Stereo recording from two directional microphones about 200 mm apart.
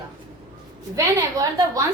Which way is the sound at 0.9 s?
15° right (ahead or behind).